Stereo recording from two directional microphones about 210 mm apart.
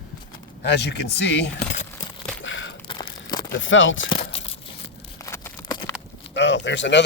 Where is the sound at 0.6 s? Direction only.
55° left (ahead or behind).